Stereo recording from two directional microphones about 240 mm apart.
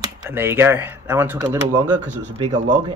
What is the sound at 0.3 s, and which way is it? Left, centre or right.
Speech, centre.